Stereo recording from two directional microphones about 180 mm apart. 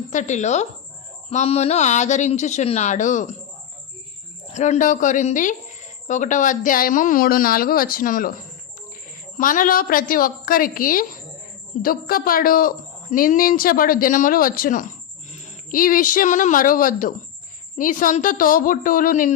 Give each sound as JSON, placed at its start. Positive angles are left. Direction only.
{"t": 0.1, "sound": "speech", "side_deg": 40}
{"t": 4.5, "sound": "a man's voice", "side_deg": 40}